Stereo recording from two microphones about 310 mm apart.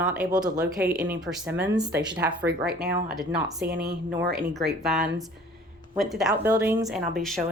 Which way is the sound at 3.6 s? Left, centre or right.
Right.